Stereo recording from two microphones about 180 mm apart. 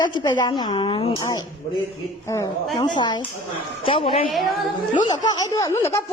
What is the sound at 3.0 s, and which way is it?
A woman's voice, 25° left (ahead or behind).